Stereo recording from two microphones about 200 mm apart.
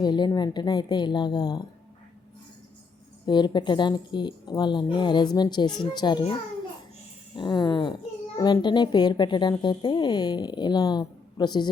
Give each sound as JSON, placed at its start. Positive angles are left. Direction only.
{"t": 0.0, "sound": "a woman's voice", "side_deg": 20}
{"t": 3.2, "sound": "a woman's voice", "side_deg": 20}
{"t": 7.3, "sound": "a woman's voice", "side_deg": 20}